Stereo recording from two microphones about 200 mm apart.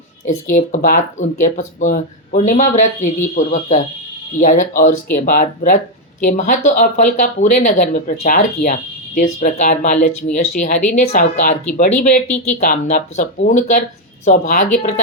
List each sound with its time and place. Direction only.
0.5 s speech: 40° left (ahead or behind)